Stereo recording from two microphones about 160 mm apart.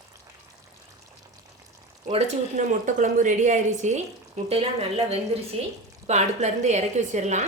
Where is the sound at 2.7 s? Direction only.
50° right (ahead or behind).